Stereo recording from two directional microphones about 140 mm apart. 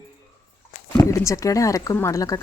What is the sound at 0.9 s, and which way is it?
Speech, 20° left (ahead or behind).